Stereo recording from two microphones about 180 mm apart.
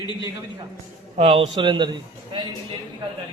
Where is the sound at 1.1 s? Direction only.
35° right (ahead or behind).